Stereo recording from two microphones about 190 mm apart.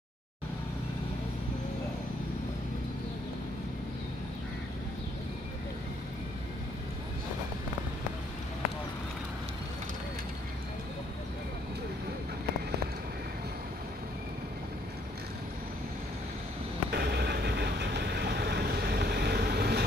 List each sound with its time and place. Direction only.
16.9 s vehicle: 55° right (ahead or behind)